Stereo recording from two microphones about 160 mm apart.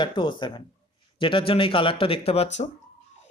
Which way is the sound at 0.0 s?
30° left (ahead or behind).